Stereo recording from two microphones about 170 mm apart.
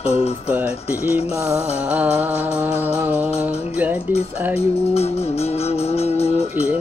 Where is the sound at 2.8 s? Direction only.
10° right (ahead or behind).